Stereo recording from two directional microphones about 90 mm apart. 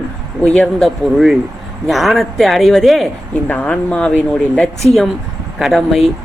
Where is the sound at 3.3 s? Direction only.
15° left (ahead or behind).